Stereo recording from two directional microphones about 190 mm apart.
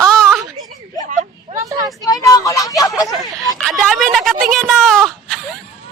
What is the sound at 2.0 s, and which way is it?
Speech, 20° left (ahead or behind).